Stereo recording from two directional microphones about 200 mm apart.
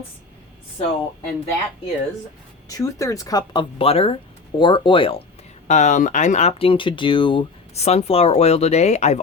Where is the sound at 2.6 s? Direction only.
15° left (ahead or behind).